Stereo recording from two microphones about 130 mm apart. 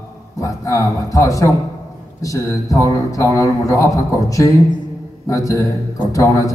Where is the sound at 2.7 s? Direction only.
25° left (ahead or behind).